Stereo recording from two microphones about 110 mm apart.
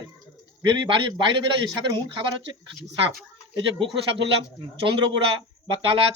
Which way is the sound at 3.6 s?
50° right (ahead or behind).